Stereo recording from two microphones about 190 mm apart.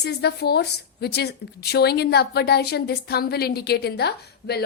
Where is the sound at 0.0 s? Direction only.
60° left (ahead or behind).